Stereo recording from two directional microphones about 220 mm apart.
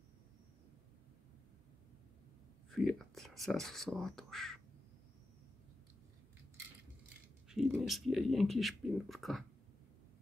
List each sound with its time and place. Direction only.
2.7 s speech: centre (ahead or behind)
7.4 s speech: centre (ahead or behind)